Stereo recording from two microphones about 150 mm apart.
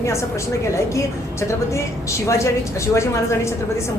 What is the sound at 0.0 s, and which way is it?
A woman's voice, 20° left (ahead or behind).